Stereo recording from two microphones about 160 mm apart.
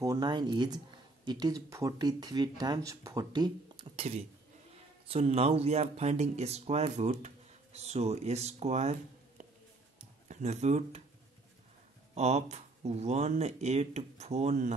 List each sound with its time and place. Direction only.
0.0 s speech: 25° right (ahead or behind); by 8.9 s 45° right (ahead or behind)
9.4 s a sound: 50° right (ahead or behind)
12.2 s speech: 45° right (ahead or behind)